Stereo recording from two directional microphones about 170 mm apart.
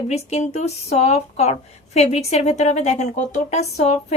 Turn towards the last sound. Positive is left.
turn(degrees=40)  # may be behind; listen again after turning